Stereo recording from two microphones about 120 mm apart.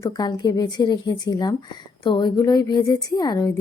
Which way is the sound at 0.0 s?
30° left (ahead or behind).